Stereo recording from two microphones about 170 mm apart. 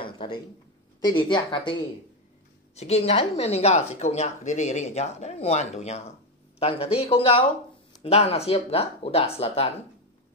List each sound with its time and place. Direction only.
0.0 s a sound: 30° left (ahead or behind)
1.0 s a woman's voice: 25° left (ahead or behind)
2.7 s speech: 40° left (ahead or behind)